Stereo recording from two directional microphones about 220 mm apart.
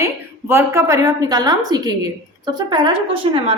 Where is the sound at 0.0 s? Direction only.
10° right (ahead or behind).